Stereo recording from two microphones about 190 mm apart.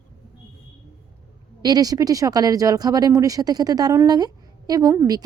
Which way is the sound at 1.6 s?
20° right (ahead or behind).